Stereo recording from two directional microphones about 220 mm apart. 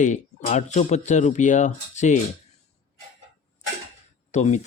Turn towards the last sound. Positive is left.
turn(degrees=30)  # may be behind; listen again after turning